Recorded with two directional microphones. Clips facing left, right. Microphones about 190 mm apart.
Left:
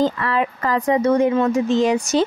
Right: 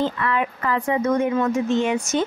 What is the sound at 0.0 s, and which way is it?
Speech, 35° left (ahead or behind).